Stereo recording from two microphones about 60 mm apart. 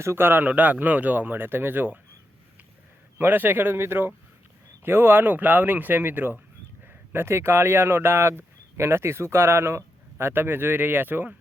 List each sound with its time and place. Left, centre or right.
0.0 s speech: right
0.4 s speech: right
3.2 s speech: right